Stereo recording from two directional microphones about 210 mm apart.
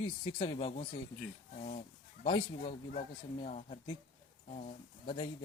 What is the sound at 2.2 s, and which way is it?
Speech, 25° left (ahead or behind).